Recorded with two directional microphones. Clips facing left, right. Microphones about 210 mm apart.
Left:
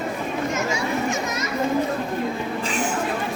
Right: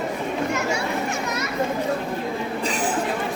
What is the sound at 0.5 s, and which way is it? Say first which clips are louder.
Children playing: even; 65° right (ahead or behind).